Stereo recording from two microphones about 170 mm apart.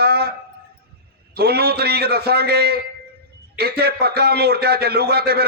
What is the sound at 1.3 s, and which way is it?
A man's voice, 65° right (ahead or behind).